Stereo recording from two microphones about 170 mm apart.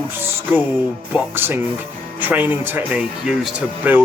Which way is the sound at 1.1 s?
10° right (ahead or behind).